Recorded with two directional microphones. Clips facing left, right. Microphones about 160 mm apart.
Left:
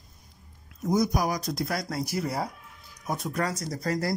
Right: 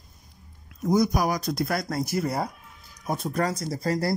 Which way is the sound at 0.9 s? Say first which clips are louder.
Right 3 dB; 70° right (ahead or behind).